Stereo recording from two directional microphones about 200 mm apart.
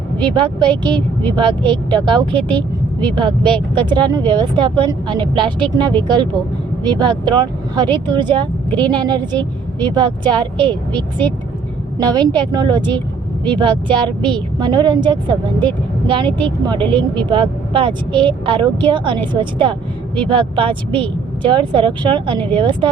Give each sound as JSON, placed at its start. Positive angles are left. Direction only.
{"t": 0.2, "sound": "a woman's voice", "side_deg": -20}